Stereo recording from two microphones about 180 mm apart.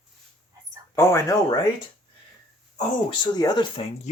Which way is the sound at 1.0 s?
15° left (ahead or behind).